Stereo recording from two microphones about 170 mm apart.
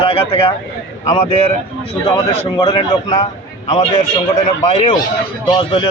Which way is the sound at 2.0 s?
30° left (ahead or behind).